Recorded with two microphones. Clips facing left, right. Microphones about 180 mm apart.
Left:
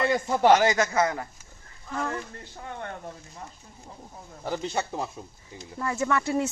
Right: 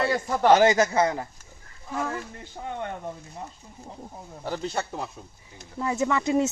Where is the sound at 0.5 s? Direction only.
30° right (ahead or behind).